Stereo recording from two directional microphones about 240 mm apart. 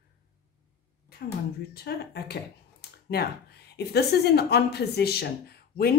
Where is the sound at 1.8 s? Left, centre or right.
Left.